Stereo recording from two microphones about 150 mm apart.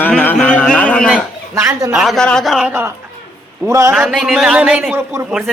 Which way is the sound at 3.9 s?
Centre (ahead or behind).